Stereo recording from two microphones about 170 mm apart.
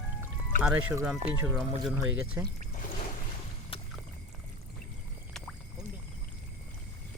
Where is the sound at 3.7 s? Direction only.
35° left (ahead or behind).